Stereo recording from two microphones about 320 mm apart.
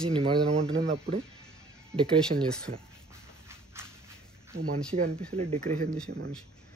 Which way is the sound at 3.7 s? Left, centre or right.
Centre.